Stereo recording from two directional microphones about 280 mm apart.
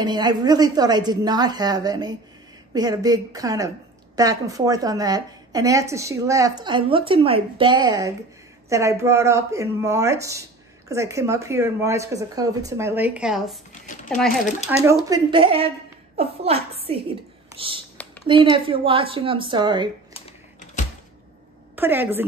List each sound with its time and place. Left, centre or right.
0.0 s a woman's voice: centre
15.0 s a woman's voice: centre
20.2 s typing: left
21.7 s a woman's voice: centre